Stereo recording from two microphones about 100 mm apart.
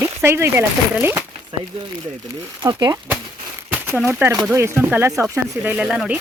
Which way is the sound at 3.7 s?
20° right (ahead or behind).